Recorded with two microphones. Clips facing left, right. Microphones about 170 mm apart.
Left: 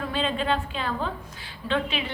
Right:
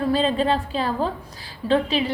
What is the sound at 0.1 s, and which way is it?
A woman's voice, 35° right (ahead or behind).